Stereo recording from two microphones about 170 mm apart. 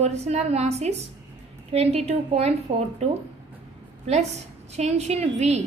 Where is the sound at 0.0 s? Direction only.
40° right (ahead or behind).